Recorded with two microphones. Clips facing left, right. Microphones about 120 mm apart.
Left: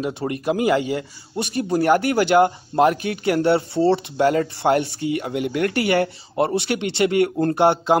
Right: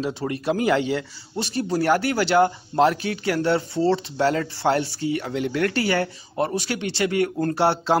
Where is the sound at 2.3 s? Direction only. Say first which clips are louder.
Left 1 dB; 15° left (ahead or behind).